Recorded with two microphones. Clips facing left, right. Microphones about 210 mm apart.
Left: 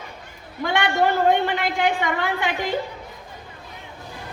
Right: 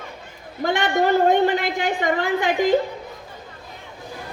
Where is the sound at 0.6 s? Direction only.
45° right (ahead or behind).